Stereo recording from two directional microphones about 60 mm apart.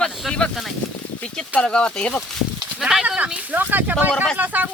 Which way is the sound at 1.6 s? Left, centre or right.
Centre.